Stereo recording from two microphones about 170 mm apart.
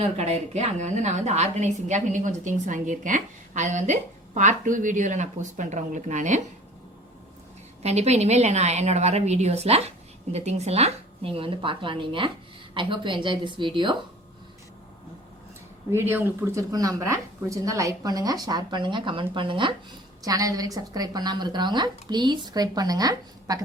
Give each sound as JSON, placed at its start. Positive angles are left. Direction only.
{"t": 0.0, "sound": "a woman's voice", "side_deg": -40}
{"t": 7.8, "sound": "a woman's voice", "side_deg": -40}
{"t": 15.9, "sound": "a woman's voice", "side_deg": -15}